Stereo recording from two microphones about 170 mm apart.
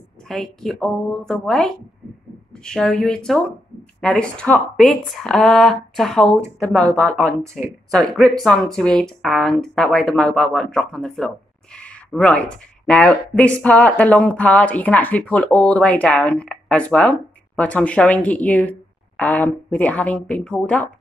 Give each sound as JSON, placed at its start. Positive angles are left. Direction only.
{"t": 0.3, "sound": "a woman's voice", "side_deg": 0}
{"t": 7.5, "sound": "speech", "side_deg": 0}